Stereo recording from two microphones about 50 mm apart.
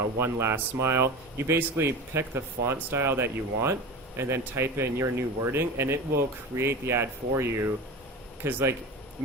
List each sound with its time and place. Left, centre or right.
0.2 s speech: right
8.4 s speech: right